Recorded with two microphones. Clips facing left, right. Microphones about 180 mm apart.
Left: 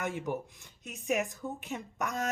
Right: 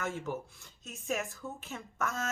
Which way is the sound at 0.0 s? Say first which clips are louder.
Left 2 dB; 15° left (ahead or behind).